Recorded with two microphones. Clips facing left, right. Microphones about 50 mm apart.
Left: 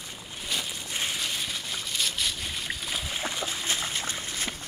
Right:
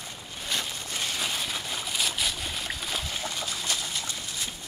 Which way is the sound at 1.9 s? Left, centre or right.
Centre.